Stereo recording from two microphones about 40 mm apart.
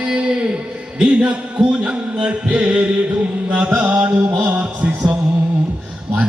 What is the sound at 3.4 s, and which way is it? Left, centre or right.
Chant, right.